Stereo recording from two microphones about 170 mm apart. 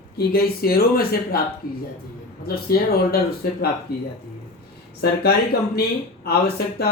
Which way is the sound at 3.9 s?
70° left (ahead or behind).